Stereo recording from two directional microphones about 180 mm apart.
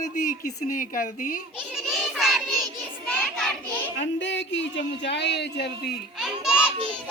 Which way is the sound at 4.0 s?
90° left.